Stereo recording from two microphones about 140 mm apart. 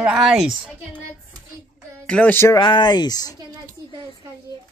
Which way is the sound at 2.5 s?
35° left (ahead or behind).